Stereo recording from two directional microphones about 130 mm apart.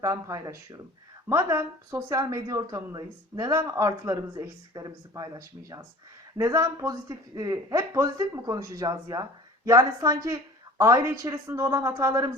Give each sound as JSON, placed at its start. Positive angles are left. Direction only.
{"t": 0.0, "sound": "a woman's voice", "side_deg": -25}